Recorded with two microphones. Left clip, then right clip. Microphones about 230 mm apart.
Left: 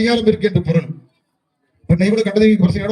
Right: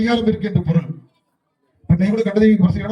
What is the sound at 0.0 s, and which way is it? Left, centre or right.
Speech, left.